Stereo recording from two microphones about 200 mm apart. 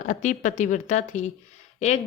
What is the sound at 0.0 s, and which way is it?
A woman's voice, 35° left (ahead or behind).